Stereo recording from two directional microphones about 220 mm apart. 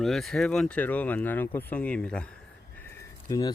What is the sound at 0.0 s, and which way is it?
Speech, centre (ahead or behind).